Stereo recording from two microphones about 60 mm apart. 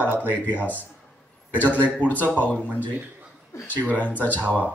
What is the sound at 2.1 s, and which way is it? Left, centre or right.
Speech, left.